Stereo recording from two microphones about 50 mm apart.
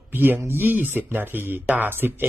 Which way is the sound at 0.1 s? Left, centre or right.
Right.